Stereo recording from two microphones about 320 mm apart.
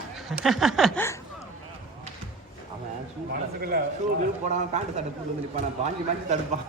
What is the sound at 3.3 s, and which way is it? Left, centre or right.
A man's voice, right.